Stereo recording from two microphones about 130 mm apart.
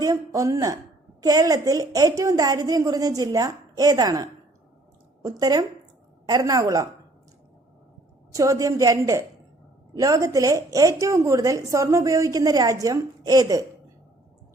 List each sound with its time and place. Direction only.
0.0 s a woman's voice: 25° right (ahead or behind)
8.3 s a woman's voice: 25° right (ahead or behind)